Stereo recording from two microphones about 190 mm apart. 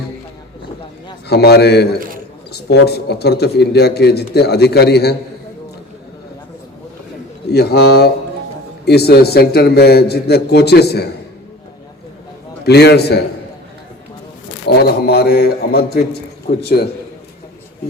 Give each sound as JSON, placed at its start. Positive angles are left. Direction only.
{"t": 1.3, "sound": "speech", "side_deg": 60}
{"t": 7.5, "sound": "speech", "side_deg": 60}
{"t": 12.6, "sound": "speech", "side_deg": 60}
{"t": 14.7, "sound": "speech", "side_deg": 55}